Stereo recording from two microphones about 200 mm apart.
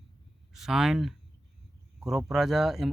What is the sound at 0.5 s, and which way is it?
Speech, centre (ahead or behind).